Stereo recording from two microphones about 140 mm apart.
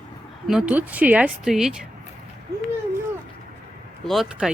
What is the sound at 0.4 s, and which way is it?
Speech, 5° right (ahead or behind).